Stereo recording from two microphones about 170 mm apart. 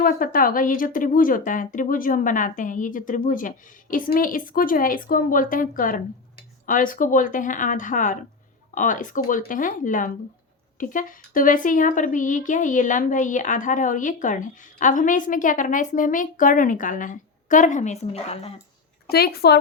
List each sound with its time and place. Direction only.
0.0 s a woman's voice: 55° left (ahead or behind); by 18.5 s 40° left (ahead or behind)
19.0 s speech: 65° left (ahead or behind)